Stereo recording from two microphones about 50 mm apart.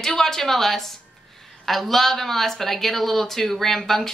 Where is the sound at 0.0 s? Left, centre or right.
Centre.